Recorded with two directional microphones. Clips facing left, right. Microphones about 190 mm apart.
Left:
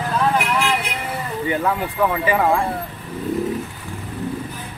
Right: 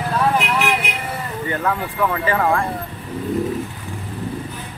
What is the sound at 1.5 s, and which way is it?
Speech, 10° left (ahead or behind).